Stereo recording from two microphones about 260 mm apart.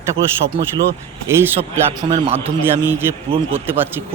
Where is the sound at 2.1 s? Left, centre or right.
Right.